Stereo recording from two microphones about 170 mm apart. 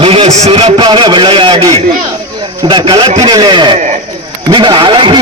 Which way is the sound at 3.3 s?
25° right (ahead or behind).